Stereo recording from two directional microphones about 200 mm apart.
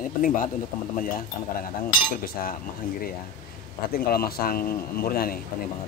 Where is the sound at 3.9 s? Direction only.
50° left (ahead or behind).